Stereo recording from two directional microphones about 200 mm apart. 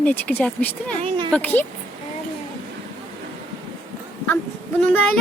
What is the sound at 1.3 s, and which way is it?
Speech, 5° left (ahead or behind).